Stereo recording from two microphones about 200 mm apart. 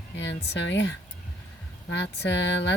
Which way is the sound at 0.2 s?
65° left (ahead or behind).